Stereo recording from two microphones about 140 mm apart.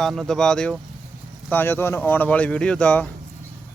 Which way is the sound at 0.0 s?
Centre (ahead or behind).